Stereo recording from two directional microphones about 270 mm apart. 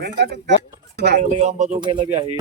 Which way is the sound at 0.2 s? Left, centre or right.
Right.